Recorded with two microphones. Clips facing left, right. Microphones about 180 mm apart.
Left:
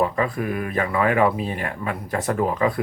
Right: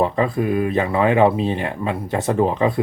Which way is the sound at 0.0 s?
25° right (ahead or behind).